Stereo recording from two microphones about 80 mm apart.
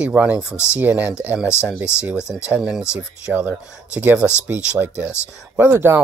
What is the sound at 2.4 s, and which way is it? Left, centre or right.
Speech, centre.